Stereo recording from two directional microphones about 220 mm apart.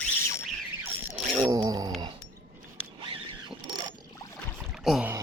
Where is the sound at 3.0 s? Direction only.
20° right (ahead or behind).